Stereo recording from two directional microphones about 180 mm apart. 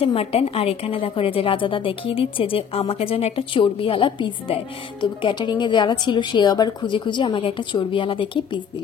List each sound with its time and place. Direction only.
0.0 s a woman's voice: 35° left (ahead or behind)